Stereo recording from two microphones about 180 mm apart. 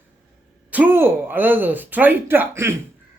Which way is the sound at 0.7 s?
10° right (ahead or behind).